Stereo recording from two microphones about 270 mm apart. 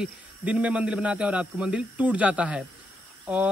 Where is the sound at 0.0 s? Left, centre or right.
Centre.